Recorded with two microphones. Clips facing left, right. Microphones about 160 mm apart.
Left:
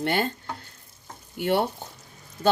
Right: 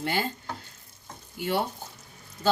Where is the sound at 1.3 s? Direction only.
60° left (ahead or behind).